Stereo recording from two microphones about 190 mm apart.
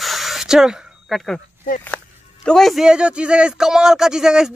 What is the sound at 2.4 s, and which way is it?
Speech, centre (ahead or behind).